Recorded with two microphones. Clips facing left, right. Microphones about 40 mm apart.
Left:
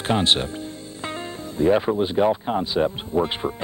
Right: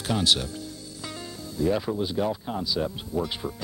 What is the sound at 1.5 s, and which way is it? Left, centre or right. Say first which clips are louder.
Speech: left 7 dB; left.